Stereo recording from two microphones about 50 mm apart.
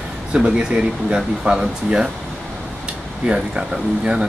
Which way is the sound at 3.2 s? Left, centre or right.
Centre.